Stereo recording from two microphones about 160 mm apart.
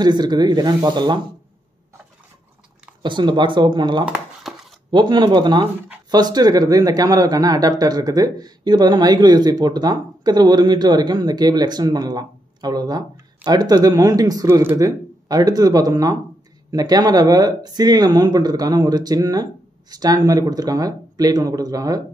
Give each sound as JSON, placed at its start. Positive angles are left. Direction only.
{"t": 0.0, "sound": "speech", "side_deg": -25}
{"t": 3.0, "sound": "speech", "side_deg": -30}
{"t": 4.0, "sound": "crumpling", "side_deg": 0}
{"t": 4.9, "sound": "speech", "side_deg": -30}